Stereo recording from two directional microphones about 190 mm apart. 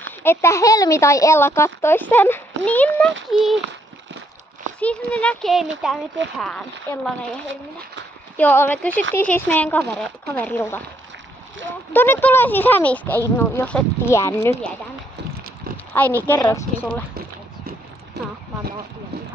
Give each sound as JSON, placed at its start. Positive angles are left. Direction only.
{"t": 0.2, "sound": "a child's voice", "side_deg": 10}
{"t": 4.7, "sound": "a child's voice", "side_deg": 5}
{"t": 8.4, "sound": "a child's voice", "side_deg": 10}
{"t": 11.9, "sound": "a child's voice", "side_deg": 10}
{"t": 15.9, "sound": "a child's voice", "side_deg": 10}
{"t": 18.2, "sound": "a sound", "side_deg": -60}